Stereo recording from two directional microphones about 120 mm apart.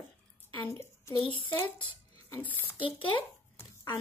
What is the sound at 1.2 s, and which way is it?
Speech, 45° left (ahead or behind).